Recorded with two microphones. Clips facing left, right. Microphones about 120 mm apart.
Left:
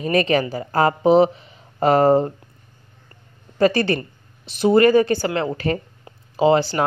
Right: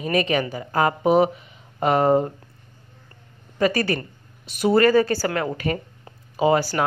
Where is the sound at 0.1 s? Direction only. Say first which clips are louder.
Left 3 dB; 35° left (ahead or behind).